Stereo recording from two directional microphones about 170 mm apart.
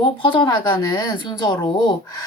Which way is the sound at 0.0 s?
30° left (ahead or behind).